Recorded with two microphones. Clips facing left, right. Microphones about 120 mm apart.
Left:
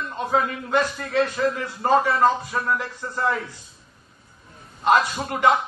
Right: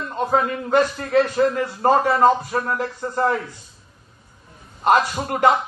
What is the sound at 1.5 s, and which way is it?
A man's voice, 45° right (ahead or behind).